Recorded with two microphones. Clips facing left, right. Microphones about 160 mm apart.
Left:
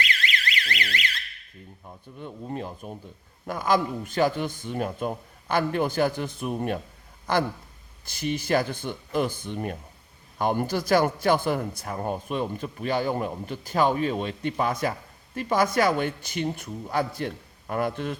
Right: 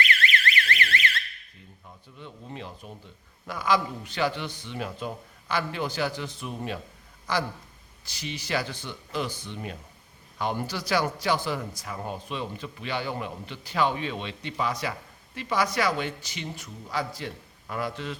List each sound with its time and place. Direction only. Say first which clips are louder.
0.3 s alarm: right 3 dB; 15° left (ahead or behind)
2.1 s a man's voice: left 7 dB; 45° left (ahead or behind)